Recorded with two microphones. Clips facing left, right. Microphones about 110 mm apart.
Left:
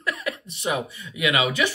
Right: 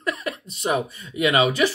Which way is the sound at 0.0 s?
35° right (ahead or behind).